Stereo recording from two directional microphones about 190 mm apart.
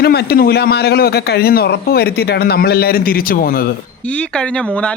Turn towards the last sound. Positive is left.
turn(degrees=50)  # may be behind; listen again after turning